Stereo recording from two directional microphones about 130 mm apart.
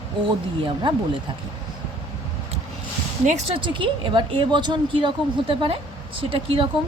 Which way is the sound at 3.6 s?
40° right (ahead or behind).